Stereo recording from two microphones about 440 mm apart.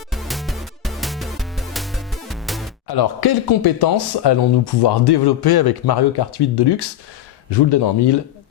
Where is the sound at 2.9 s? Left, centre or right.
Left.